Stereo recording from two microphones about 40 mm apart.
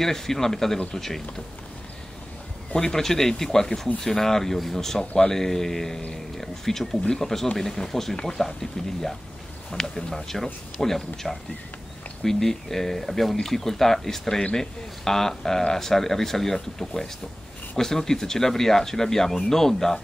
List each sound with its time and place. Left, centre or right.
0.0 s speech: centre
2.7 s speech: centre
6.3 s a sound: centre
7.2 s speech: centre
9.7 s speech: centre